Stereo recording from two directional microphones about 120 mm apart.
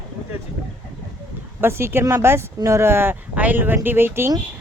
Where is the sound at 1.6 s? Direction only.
20° right (ahead or behind).